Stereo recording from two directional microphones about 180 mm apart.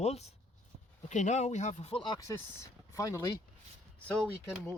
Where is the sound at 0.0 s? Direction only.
35° left (ahead or behind); by 3.2 s 20° left (ahead or behind).